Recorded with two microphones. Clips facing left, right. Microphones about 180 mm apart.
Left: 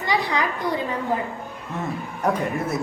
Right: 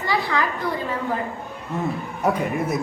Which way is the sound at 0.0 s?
20° left (ahead or behind).